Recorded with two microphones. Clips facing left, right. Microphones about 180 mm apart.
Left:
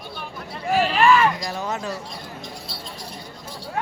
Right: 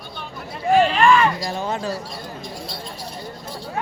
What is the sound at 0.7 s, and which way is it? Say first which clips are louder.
Speech: right 2 dB; 5° left (ahead or behind).